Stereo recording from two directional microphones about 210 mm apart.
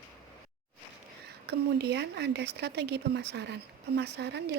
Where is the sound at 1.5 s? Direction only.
55° right (ahead or behind).